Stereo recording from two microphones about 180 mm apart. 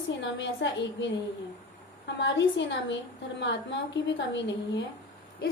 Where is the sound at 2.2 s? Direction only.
90° left.